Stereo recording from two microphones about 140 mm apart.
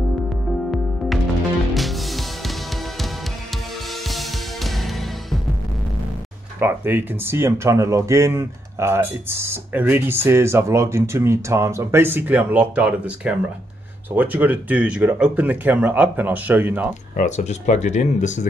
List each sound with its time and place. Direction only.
0.7 s music: centre (ahead or behind)
4.1 s music: centre (ahead or behind)
6.6 s speech: 15° right (ahead or behind)
17.2 s speech: 60° left (ahead or behind)